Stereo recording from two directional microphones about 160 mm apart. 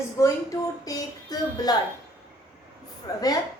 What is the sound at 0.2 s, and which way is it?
A woman's voice, 20° left (ahead or behind).